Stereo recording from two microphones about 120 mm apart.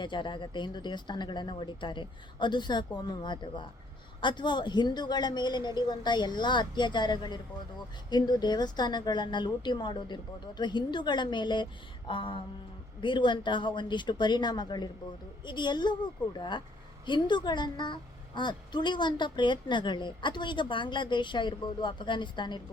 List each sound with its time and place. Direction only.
0.0 s a woman's voice: 40° left (ahead or behind)